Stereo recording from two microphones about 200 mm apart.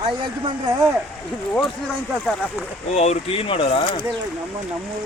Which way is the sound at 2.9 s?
30° left (ahead or behind).